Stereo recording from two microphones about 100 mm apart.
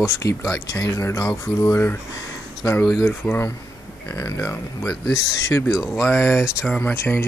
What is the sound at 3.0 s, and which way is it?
Speech, 15° left (ahead or behind).